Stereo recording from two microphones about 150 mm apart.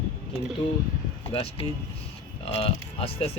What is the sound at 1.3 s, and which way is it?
Speech, 40° left (ahead or behind).